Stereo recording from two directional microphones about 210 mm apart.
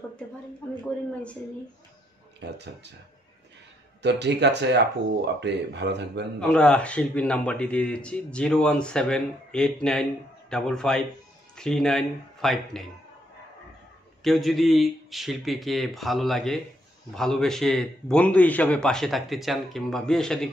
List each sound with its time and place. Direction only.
2.4 s speech: 55° right (ahead or behind)
4.0 s speech: 55° right (ahead or behind)
6.4 s a man's voice: 5° left (ahead or behind)
14.2 s a man's voice: centre (ahead or behind)